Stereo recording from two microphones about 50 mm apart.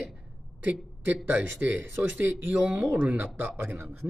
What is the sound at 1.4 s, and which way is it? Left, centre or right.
Speech, right.